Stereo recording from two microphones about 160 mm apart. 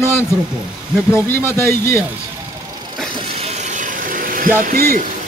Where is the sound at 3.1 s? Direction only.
40° right (ahead or behind); by 5.0 s 65° right (ahead or behind).